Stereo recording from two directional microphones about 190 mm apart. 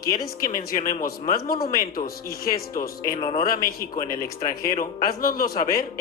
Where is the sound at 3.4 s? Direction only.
50° left (ahead or behind).